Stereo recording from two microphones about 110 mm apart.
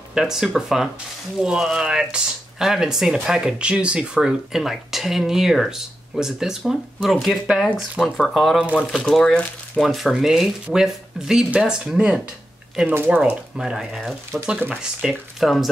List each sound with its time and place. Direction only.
0.1 s speech: 5° right (ahead or behind)
14.4 s speech: 15° right (ahead or behind)
15.0 s speech: centre (ahead or behind)